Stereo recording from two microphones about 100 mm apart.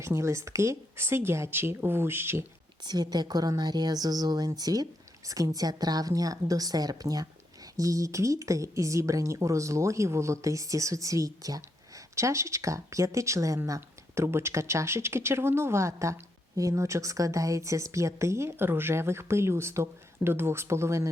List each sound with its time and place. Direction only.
0.0 s a woman's voice: 30° right (ahead or behind)
2.8 s a woman's voice: 45° right (ahead or behind)